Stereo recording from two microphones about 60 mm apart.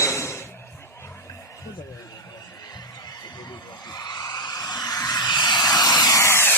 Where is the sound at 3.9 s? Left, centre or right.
Left.